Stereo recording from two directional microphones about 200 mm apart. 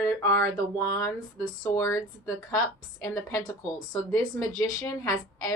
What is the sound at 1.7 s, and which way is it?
Speech, 15° left (ahead or behind).